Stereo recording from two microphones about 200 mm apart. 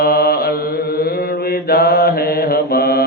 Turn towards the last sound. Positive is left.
turn(degrees=50)  # may be behind; listen again after turning